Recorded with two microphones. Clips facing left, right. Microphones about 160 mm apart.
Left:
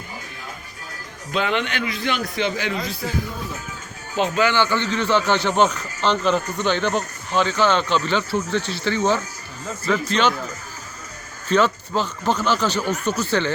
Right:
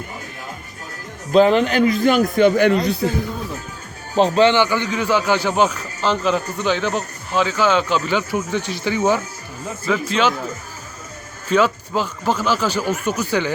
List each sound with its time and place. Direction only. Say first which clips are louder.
1.3 s a man's voice: right 10 dB; 35° right (ahead or behind); by 2.9 s 60° right (ahead or behind)
4.1 s speech: right 6 dB; 30° right (ahead or behind)
4.5 s a man's voice: right 2 dB; 15° right (ahead or behind)
11.4 s speech: right 2 dB; 10° right (ahead or behind)